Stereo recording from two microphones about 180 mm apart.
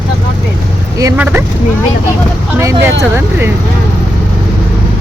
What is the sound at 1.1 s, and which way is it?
Speech, 10° right (ahead or behind).